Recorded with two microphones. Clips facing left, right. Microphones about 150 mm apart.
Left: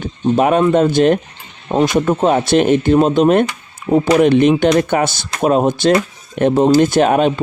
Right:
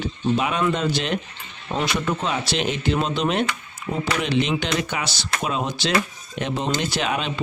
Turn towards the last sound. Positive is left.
turn(degrees=50)  # may be behind; listen again after turning